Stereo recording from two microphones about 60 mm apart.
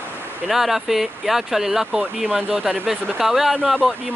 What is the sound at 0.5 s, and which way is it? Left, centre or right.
Speech, centre.